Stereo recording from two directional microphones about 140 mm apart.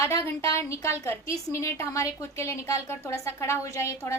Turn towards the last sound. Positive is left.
turn(degrees=20)  # may be behind; listen again after turning